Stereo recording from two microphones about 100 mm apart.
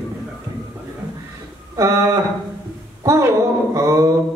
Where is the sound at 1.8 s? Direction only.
30° right (ahead or behind).